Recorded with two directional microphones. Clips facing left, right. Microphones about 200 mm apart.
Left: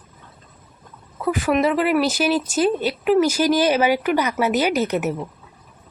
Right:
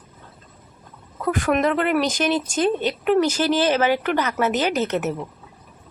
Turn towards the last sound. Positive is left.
turn(degrees=10)  # may be behind; listen again after turning